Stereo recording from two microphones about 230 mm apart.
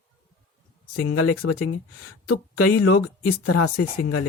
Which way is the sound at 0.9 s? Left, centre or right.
Left.